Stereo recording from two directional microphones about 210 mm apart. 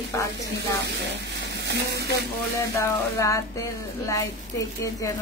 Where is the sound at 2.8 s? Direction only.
15° left (ahead or behind).